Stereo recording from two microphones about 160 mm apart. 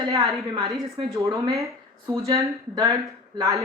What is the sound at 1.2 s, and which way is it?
Speech, 20° right (ahead or behind).